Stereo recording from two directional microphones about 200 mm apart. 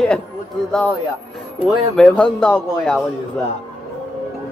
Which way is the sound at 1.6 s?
5° left (ahead or behind).